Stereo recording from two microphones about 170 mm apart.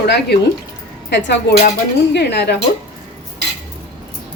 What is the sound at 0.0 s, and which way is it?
Speech, 75° left (ahead or behind).